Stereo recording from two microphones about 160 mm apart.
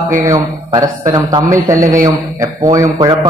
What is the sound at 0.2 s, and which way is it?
A man's voice, 20° right (ahead or behind).